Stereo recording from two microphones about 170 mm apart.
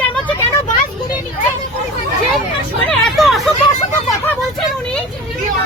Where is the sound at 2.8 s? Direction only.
Centre (ahead or behind).